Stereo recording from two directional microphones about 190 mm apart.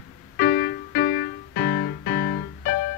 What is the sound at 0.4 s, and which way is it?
Music, 55° left (ahead or behind).